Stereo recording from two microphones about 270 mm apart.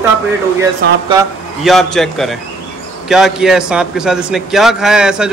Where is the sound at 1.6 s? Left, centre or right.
Centre.